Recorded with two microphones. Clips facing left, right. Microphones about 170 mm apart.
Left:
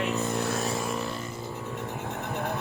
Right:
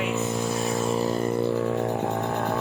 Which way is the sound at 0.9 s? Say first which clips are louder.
Right 8 dB; 35° right (ahead or behind).